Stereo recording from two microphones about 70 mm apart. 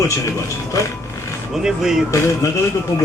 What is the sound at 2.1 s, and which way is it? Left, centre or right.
Speech, left.